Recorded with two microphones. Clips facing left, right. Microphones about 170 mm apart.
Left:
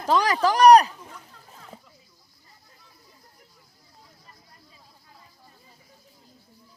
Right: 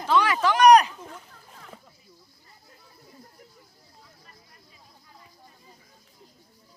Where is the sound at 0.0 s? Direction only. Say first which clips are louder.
Left 1 dB; 40° left (ahead or behind).